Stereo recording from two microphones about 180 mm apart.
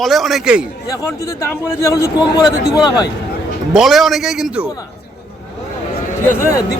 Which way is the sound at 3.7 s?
Centre (ahead or behind).